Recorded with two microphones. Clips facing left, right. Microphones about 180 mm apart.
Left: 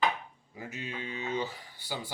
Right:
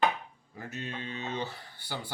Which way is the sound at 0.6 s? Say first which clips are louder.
Even; 10° left (ahead or behind).